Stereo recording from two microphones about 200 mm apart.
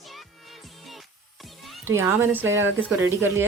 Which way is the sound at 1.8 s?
10° right (ahead or behind).